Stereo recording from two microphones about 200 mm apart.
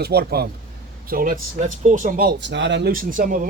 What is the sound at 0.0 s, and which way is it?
A man's voice, 50° right (ahead or behind).